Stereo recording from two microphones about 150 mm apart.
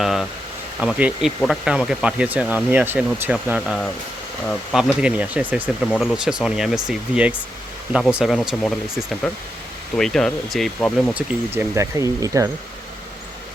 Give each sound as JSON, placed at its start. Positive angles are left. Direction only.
{"t": 0.0, "sound": "speech", "side_deg": 0}
{"t": 4.4, "sound": "speech", "side_deg": 0}
{"t": 11.1, "sound": "speech", "side_deg": -10}